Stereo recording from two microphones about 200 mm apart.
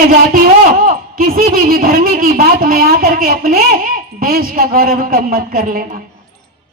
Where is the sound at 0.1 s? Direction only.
45° right (ahead or behind).